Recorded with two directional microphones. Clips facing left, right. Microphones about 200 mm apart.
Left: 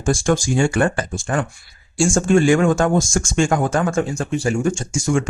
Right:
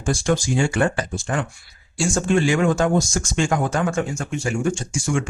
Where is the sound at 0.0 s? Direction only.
50° left (ahead or behind).